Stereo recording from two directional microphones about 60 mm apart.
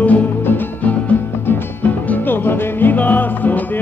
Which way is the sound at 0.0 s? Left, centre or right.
Left.